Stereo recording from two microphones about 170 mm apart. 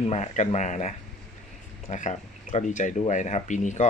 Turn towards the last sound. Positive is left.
turn(degrees=45)  # may be behind; listen again after turning